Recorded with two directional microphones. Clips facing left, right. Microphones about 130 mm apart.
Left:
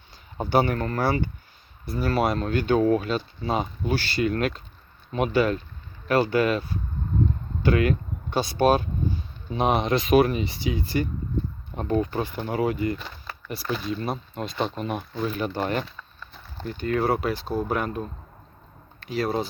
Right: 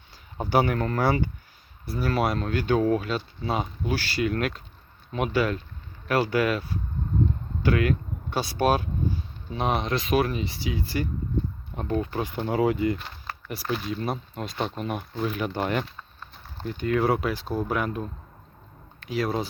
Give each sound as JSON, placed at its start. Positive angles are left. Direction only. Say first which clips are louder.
{"t": 0.3, "sound": "speech", "louder": "left 1 dB", "side_deg": -10}
{"t": 1.8, "sound": "speech", "louder": "left 2 dB", "side_deg": -5}
{"t": 12.2, "sound": "speech", "louder": "right 1 dB", "side_deg": -20}
{"t": 13.5, "sound": "speech", "louder": "left 1 dB", "side_deg": -10}